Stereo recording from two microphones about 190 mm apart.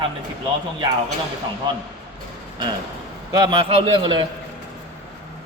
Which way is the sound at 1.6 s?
25° right (ahead or behind).